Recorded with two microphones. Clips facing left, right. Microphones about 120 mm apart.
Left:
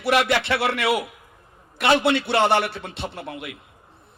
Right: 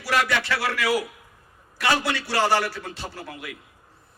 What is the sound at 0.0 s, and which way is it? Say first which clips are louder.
A man's voice: left 4 dB; 25° left (ahead or behind).